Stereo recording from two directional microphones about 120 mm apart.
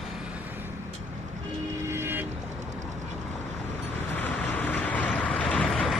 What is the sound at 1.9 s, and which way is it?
Vehicle, 20° right (ahead or behind).